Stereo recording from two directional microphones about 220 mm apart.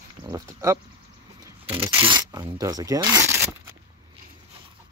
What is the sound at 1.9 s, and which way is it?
Speech, 25° right (ahead or behind).